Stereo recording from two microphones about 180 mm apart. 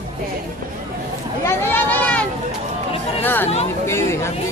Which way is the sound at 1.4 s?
15° left (ahead or behind).